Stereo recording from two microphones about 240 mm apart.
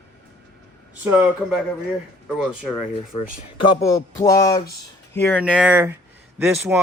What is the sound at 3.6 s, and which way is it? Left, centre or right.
Speech, centre.